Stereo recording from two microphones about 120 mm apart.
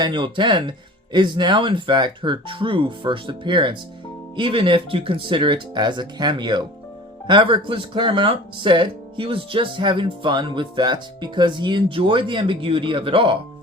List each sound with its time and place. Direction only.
0.0 s speech: 40° right (ahead or behind)